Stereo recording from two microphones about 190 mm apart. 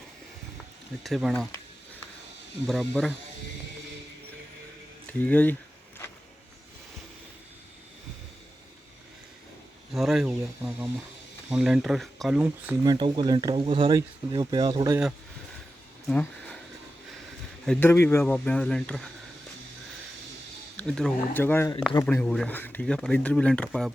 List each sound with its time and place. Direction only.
1.0 s speech: centre (ahead or behind)
2.6 s speech: centre (ahead or behind)
5.2 s speech: 10° left (ahead or behind)
9.9 s speech: centre (ahead or behind)
12.8 s speech: 20° right (ahead or behind)
16.0 s a sound: 5° left (ahead or behind)
17.7 s speech: 10° left (ahead or behind)
20.7 s speech: 5° left (ahead or behind)